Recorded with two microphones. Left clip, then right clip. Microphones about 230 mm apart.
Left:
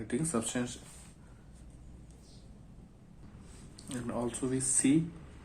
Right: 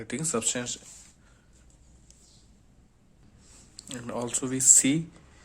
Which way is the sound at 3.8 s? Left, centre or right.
Right.